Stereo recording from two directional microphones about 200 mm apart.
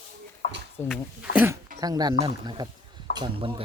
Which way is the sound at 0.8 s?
10° left (ahead or behind).